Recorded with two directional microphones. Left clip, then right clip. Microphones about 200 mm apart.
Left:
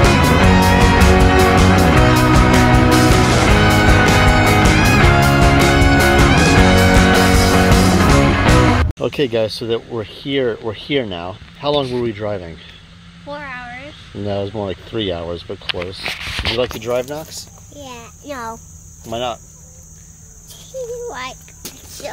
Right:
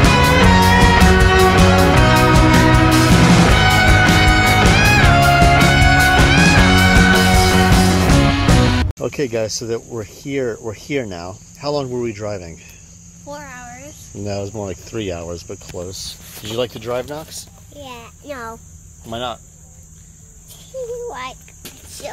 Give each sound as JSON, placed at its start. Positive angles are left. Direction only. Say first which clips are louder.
{"t": 0.0, "sound": "music", "louder": "right 1 dB", "side_deg": 0}
{"t": 9.0, "sound": "speech", "louder": "left 3 dB", "side_deg": 10}
{"t": 9.6, "sound": "speech", "louder": "left 3 dB", "side_deg": 0}
{"t": 13.3, "sound": "a sound", "louder": "left 4 dB", "side_deg": -15}
{"t": 14.1, "sound": "speech", "louder": "left 3 dB", "side_deg": 0}
{"t": 21.1, "sound": "cricket", "louder": "left 1 dB", "side_deg": 5}